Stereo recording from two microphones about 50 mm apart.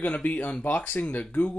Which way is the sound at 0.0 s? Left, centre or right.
Left.